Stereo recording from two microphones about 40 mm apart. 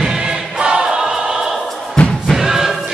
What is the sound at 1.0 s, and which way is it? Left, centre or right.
Choir, centre.